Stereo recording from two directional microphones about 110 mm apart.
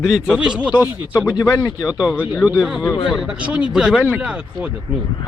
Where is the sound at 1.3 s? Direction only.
35° left (ahead or behind).